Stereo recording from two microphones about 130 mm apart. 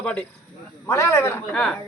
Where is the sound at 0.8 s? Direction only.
20° left (ahead or behind).